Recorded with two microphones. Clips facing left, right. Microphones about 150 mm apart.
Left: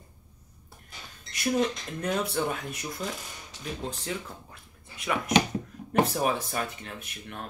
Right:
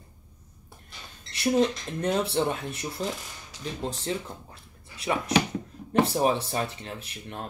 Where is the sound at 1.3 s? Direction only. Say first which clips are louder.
Right 3 dB; 30° right (ahead or behind).